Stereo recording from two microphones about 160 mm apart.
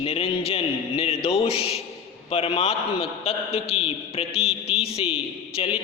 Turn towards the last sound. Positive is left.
turn(degrees=35)  # may be behind; listen again after turning